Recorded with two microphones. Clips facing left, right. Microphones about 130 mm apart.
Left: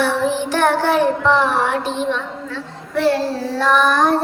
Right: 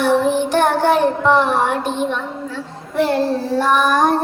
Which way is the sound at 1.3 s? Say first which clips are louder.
Right 1 dB; 50° right (ahead or behind).